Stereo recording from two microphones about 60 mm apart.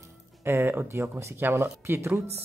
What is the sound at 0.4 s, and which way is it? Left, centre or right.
Speech, right.